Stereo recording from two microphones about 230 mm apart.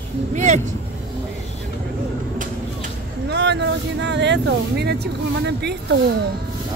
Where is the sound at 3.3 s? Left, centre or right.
Right.